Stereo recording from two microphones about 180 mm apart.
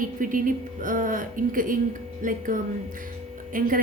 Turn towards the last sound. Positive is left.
turn(degrees=-50)  # may be behind; listen again after turning